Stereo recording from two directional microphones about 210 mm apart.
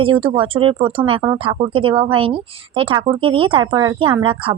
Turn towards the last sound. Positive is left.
turn(degrees=-25)  # may be behind; listen again after turning